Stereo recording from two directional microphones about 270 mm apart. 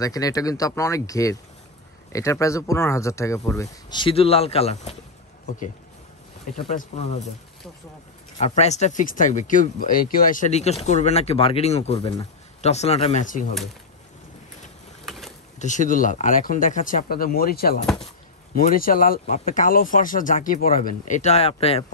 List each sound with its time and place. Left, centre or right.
0.0 s speech: centre
6.8 s speech: left
8.4 s speech: left
15.0 s boat: centre
15.6 s speech: left